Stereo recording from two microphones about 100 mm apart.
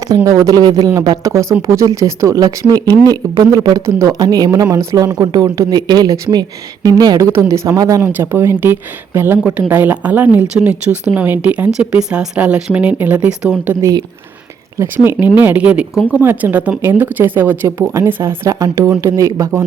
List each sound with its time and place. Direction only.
0.3 s speech: 35° right (ahead or behind)
3.8 s speech: 30° right (ahead or behind)
4.2 s speech: 40° right (ahead or behind)
5.0 s speech: 45° right (ahead or behind); by 13.7 s 10° right (ahead or behind)
14.8 s speech: 20° right (ahead or behind)